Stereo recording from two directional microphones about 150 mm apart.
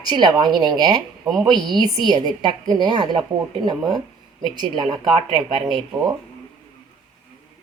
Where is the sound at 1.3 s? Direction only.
Centre (ahead or behind).